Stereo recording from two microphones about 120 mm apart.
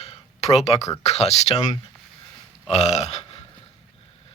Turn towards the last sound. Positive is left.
turn(degrees=60)  # may be behind; listen again after turning